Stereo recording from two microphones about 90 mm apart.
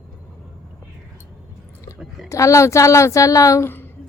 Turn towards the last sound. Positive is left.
turn(degrees=25)  # may be behind; listen again after turning